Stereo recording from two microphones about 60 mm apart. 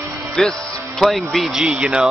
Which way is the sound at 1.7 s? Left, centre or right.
Centre.